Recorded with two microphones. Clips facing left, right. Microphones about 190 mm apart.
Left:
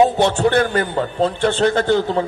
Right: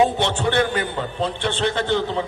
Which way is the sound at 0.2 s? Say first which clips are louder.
Left 5 dB; 45° left (ahead or behind).